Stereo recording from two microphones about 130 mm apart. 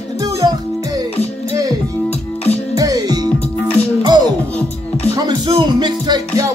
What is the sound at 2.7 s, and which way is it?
Music, 30° right (ahead or behind).